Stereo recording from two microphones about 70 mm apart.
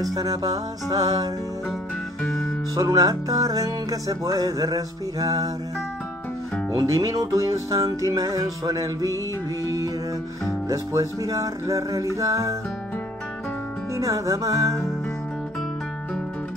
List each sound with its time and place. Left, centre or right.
0.0 s music: right
2.7 s music: right
6.7 s music: right
10.7 s speech: right
13.9 s speech: right